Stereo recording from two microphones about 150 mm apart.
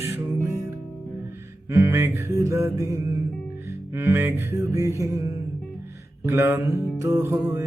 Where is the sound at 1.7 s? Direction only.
15° right (ahead or behind).